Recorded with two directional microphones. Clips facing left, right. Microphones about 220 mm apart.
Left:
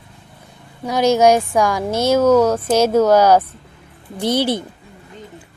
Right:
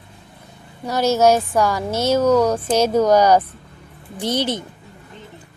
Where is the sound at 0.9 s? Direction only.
15° left (ahead or behind).